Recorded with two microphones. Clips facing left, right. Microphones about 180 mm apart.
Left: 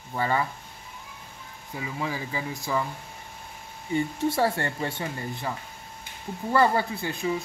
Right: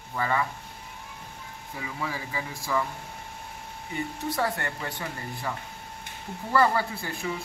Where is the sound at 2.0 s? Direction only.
25° left (ahead or behind).